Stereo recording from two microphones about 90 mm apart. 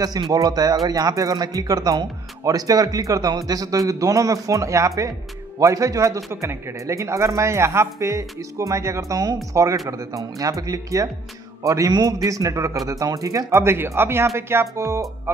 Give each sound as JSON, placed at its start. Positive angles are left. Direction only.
{"t": 0.3, "sound": "speech", "side_deg": -45}